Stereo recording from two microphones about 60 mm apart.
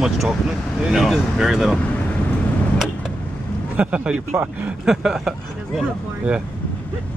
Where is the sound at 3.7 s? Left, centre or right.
Right.